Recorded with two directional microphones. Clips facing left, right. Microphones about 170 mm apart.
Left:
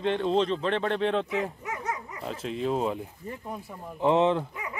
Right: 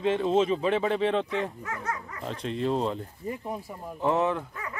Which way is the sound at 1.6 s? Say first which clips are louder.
Left 1 dB; 20° left (ahead or behind).